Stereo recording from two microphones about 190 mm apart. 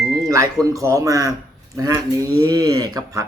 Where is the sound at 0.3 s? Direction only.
15° right (ahead or behind).